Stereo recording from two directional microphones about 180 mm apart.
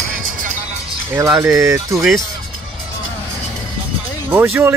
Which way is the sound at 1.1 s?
15° right (ahead or behind).